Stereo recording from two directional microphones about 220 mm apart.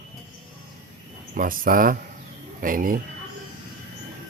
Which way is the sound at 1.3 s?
40° right (ahead or behind).